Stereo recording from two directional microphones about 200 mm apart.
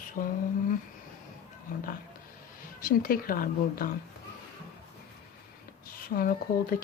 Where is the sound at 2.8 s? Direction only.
45° left (ahead or behind).